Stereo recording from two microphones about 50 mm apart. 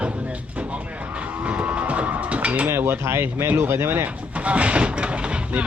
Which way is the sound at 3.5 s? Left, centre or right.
Right.